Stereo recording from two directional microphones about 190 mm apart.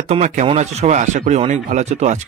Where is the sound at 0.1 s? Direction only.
35° right (ahead or behind).